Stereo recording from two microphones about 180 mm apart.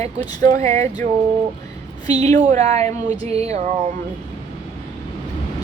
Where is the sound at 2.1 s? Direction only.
40° right (ahead or behind).